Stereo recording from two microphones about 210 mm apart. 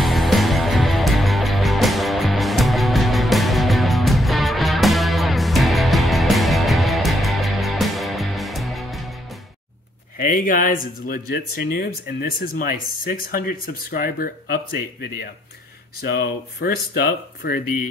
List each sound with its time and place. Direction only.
0.0 s music: centre (ahead or behind)
10.1 s speech: 40° left (ahead or behind)